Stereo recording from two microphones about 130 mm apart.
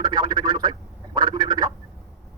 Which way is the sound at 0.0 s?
30° right (ahead or behind).